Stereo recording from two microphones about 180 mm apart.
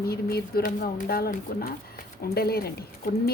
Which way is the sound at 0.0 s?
60° left (ahead or behind).